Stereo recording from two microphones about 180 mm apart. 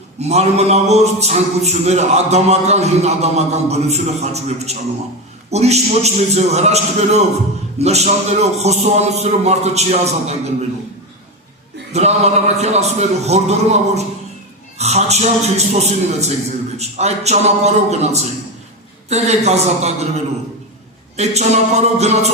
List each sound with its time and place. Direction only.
0.2 s a man's voice: 35° right (ahead or behind)
11.9 s a man's voice: 35° right (ahead or behind)
21.2 s a man's voice: 40° right (ahead or behind)